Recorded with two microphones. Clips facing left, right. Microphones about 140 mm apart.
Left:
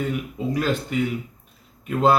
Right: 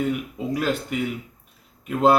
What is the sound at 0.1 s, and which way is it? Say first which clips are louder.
A man's voice: even; 5° right (ahead or behind).